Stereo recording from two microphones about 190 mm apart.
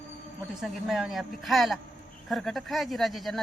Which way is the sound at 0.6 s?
Centre (ahead or behind).